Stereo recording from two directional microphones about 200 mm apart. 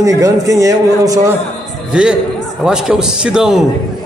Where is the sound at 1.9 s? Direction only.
5° right (ahead or behind).